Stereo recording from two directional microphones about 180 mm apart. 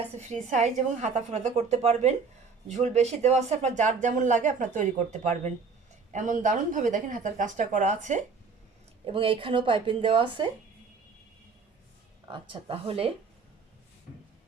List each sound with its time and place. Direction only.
0.2 s speech: 40° right (ahead or behind)
9.0 s speech: 30° right (ahead or behind)
12.3 s speech: 30° right (ahead or behind)